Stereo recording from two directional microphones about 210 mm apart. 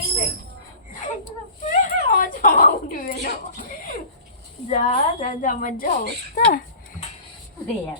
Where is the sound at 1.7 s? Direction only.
40° left (ahead or behind).